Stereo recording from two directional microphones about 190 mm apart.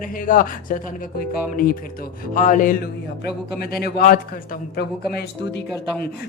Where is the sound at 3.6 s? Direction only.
55° left (ahead or behind).